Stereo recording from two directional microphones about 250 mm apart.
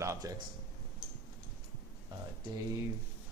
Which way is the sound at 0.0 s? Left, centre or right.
Centre.